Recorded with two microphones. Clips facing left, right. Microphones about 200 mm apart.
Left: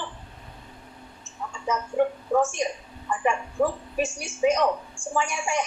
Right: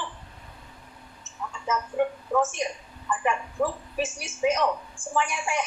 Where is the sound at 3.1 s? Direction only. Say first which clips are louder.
Left 2 dB; 30° left (ahead or behind).